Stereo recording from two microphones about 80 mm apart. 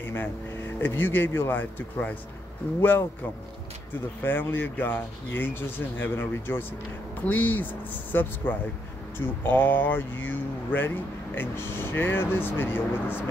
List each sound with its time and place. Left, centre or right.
0.0 s speech: left
4.2 s speech: left